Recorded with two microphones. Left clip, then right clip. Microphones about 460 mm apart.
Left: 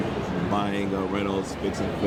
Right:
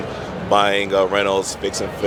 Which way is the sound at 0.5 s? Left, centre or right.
Right.